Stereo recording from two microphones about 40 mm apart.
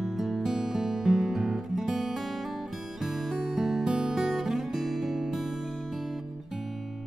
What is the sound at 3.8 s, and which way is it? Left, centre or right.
Music, right.